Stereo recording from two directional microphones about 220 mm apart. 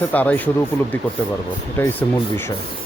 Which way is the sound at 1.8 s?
10° left (ahead or behind).